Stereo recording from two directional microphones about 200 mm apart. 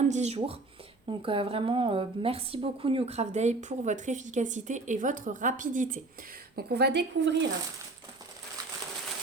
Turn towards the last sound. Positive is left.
turn(degrees=-60)  # may be behind; listen again after turning